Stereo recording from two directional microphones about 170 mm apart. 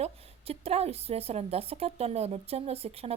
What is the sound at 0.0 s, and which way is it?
Speech, 35° right (ahead or behind).